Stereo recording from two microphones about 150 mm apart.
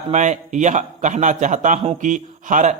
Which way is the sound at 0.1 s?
55° right (ahead or behind).